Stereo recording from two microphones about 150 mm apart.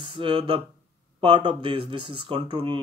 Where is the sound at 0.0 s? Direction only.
35° right (ahead or behind).